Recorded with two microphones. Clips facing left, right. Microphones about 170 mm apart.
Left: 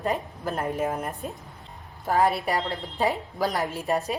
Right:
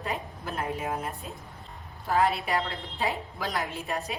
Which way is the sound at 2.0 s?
40° left (ahead or behind).